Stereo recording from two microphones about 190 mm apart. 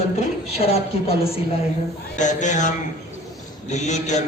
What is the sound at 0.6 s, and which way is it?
A man's voice, 30° left (ahead or behind).